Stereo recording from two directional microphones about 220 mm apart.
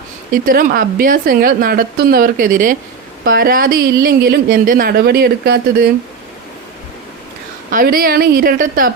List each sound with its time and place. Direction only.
0.4 s a woman's voice: 40° right (ahead or behind)
7.7 s a woman's voice: 40° right (ahead or behind)